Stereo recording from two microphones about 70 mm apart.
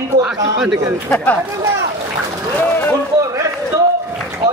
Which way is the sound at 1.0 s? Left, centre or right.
Left.